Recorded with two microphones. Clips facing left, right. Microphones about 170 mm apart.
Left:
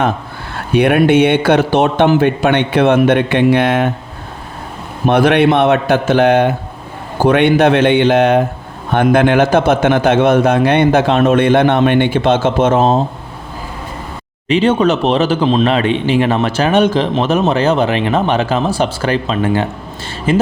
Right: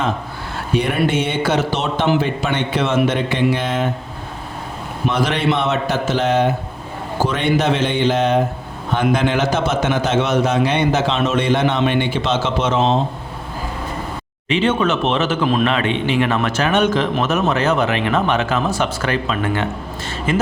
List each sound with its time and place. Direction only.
0.7 s a man's voice: 65° left (ahead or behind)
5.0 s a man's voice: 60° left (ahead or behind)
14.4 s speech: 35° left (ahead or behind)